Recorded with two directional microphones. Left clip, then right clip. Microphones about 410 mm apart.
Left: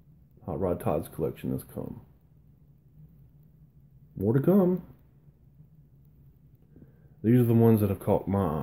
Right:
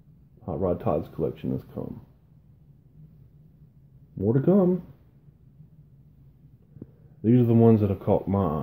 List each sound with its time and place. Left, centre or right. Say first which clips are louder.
0.4 s speech: right 3 dB; centre
4.2 s speech: right 2 dB; centre
7.2 s speech: right 3 dB; centre